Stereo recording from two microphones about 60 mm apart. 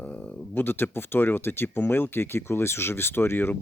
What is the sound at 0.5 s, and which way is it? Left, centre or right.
Speech, left.